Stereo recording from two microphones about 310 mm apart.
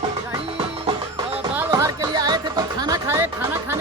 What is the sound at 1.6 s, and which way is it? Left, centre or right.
Music, centre.